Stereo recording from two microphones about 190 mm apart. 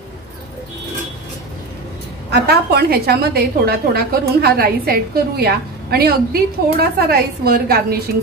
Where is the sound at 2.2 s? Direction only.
60° right (ahead or behind).